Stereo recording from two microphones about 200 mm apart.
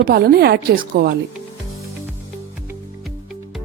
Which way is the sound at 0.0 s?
50° right (ahead or behind).